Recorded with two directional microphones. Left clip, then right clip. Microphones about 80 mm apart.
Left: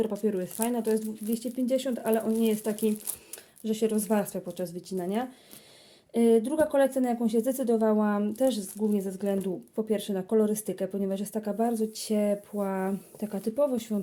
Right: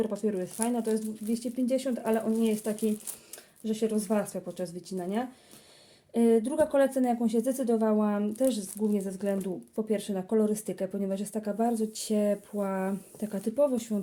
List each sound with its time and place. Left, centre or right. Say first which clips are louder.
0.3 s speech: left 1 dB; left
1.3 s speech: left 1 dB; left
2.5 s speech: left 2 dB; left